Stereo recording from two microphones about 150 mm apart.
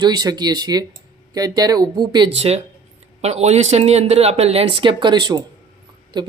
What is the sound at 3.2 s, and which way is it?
Speech, 45° right (ahead or behind).